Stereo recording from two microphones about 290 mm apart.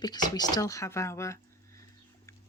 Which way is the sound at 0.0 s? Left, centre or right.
Centre.